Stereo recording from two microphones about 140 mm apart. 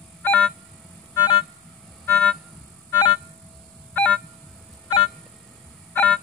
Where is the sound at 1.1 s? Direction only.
30° left (ahead or behind).